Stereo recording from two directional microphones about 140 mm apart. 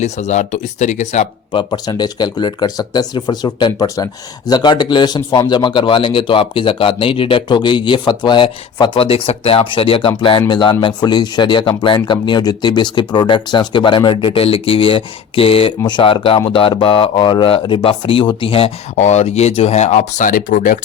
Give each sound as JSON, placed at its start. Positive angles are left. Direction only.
{"t": 0.0, "sound": "speech", "side_deg": 55}
{"t": 1.5, "sound": "speech", "side_deg": 30}